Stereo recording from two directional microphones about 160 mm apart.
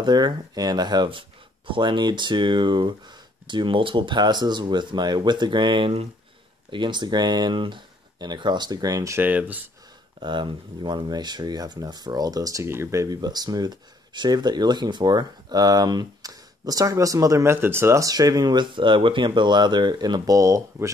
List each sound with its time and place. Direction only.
0.0 s speech: 25° right (ahead or behind); by 9.6 s 10° right (ahead or behind)
10.2 s speech: 30° right (ahead or behind)